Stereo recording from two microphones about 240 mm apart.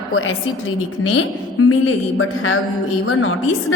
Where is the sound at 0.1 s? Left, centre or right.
Left.